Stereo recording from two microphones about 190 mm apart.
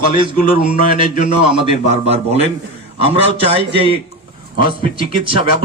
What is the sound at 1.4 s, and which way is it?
Speech, 30° right (ahead or behind).